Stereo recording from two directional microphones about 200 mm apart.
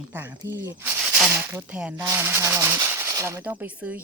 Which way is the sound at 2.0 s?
10° right (ahead or behind).